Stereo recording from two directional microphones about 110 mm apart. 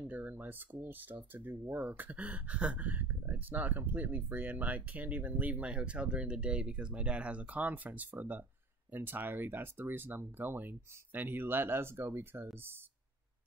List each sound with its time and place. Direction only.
0.0 s speech: 15° right (ahead or behind)